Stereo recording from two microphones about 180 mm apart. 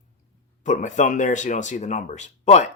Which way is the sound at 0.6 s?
45° left (ahead or behind).